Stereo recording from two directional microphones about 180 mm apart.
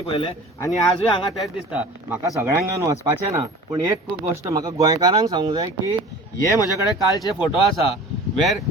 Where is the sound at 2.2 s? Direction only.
15° right (ahead or behind).